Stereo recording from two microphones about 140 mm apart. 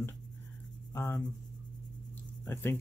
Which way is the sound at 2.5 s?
15° left (ahead or behind).